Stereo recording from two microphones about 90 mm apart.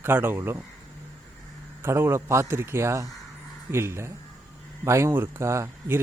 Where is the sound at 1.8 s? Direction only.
30° right (ahead or behind).